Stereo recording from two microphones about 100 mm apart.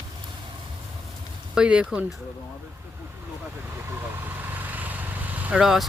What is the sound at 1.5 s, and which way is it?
Speech, 10° right (ahead or behind).